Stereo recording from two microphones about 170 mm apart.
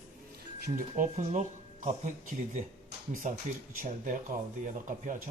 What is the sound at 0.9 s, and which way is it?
Speech, 45° right (ahead or behind).